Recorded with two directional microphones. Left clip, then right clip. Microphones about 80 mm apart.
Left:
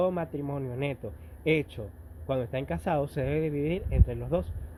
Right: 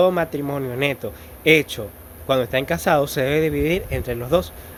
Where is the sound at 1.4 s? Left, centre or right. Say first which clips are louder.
Right 12 dB; right.